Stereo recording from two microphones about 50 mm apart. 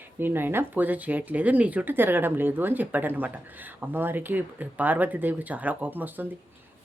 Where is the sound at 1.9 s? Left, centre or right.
Right.